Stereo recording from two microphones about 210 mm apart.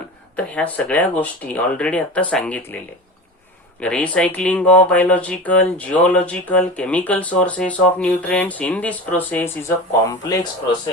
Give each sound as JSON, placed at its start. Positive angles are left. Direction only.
{"t": 0.3, "sound": "speech", "side_deg": 5}
{"t": 3.8, "sound": "speech", "side_deg": 5}